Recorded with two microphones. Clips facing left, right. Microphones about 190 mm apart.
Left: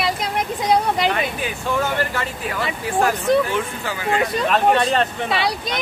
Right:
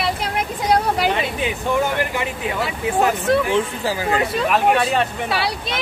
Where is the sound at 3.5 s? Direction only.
35° right (ahead or behind).